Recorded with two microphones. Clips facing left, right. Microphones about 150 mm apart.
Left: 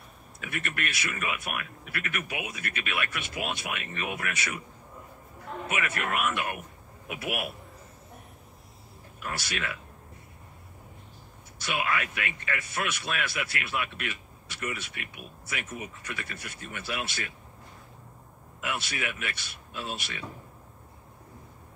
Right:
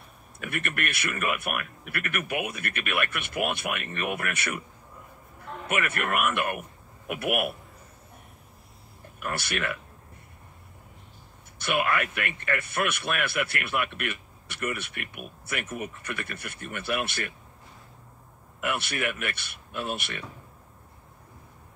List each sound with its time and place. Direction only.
0.4 s speech: 55° right (ahead or behind)
5.7 s speech: 55° right (ahead or behind)
9.2 s speech: 55° right (ahead or behind)
11.5 s speech: 55° right (ahead or behind)
18.6 s speech: 55° right (ahead or behind)